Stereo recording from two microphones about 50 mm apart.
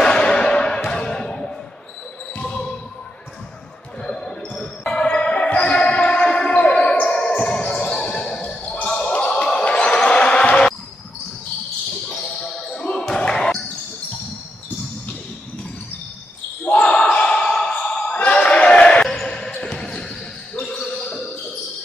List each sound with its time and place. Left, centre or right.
0.0 s music: centre
0.8 s a sound: centre
2.4 s basketball bounce: left
4.0 s basketball bounce: centre
12.2 s basketball bounce: centre
16.6 s a sound: left
18.1 s basketball bounce: left; by 19.2 s centre
19.2 s basketball bounce: left